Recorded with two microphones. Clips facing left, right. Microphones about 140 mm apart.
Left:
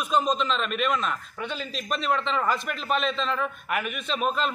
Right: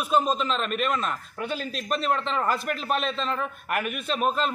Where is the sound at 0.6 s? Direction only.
45° right (ahead or behind).